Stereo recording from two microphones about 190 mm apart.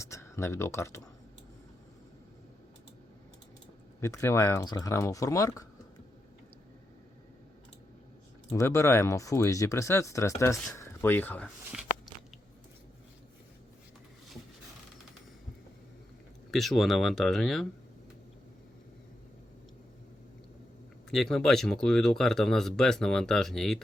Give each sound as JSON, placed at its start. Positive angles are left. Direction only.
{"t": 0.0, "sound": "speech", "side_deg": 15}
{"t": 4.0, "sound": "speech", "side_deg": 15}
{"t": 8.4, "sound": "speech", "side_deg": 15}
{"t": 16.5, "sound": "speech", "side_deg": 0}
{"t": 21.1, "sound": "speech", "side_deg": 0}